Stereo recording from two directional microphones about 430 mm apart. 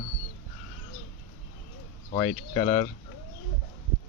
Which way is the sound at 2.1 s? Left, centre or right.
Centre.